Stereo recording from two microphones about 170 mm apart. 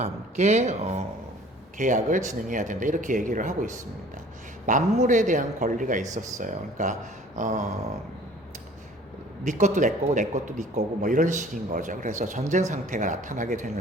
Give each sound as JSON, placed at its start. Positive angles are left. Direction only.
{"t": 0.0, "sound": "a man's voice", "side_deg": -40}
{"t": 9.4, "sound": "a man's voice", "side_deg": -45}